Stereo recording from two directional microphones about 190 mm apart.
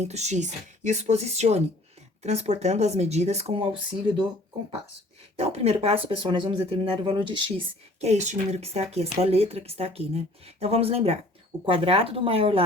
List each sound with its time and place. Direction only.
0.0 s speech: 35° right (ahead or behind)
5.4 s speech: 30° right (ahead or behind)